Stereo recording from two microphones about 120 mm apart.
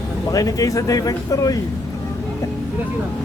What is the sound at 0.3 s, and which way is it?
Speech, 30° left (ahead or behind).